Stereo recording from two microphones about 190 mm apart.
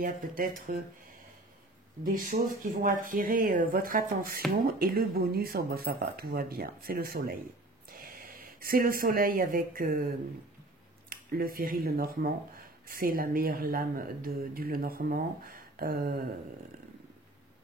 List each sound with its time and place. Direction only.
0.0 s speech: 50° right (ahead or behind)
2.0 s speech: 45° right (ahead or behind)
11.1 s speech: 50° right (ahead or behind)